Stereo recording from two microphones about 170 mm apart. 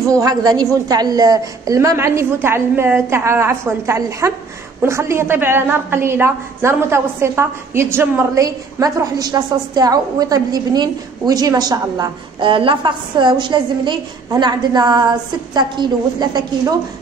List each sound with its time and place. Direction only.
0.1 s a woman's voice: 20° right (ahead or behind)